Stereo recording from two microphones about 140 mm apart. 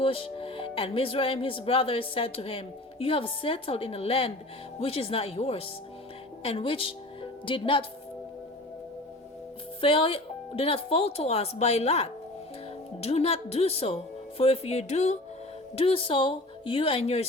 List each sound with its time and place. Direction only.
0.0 s a woman's voice: 40° left (ahead or behind)
9.8 s speech: 40° left (ahead or behind)
15.7 s speech: 45° left (ahead or behind)